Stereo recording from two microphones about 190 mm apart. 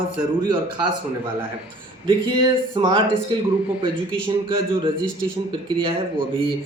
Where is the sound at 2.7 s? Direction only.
25° right (ahead or behind).